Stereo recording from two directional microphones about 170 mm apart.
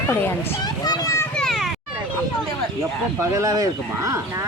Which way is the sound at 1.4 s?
Centre (ahead or behind).